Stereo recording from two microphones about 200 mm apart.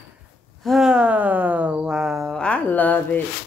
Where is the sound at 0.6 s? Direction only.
Centre (ahead or behind).